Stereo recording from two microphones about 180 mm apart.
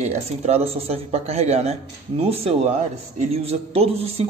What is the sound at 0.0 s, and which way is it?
A man's voice, 40° right (ahead or behind).